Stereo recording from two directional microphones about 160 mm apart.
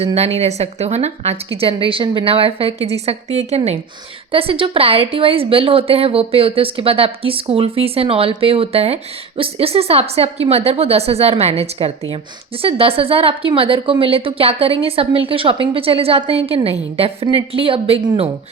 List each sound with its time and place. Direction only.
0.0 s speech: 40° right (ahead or behind)